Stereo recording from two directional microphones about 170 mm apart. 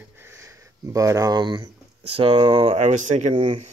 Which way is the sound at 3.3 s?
30° right (ahead or behind).